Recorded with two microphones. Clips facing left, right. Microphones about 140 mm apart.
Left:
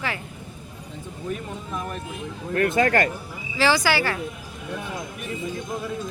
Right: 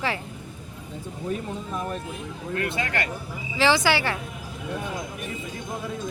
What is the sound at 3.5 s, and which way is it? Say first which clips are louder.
Speech: even; 20° right (ahead or behind).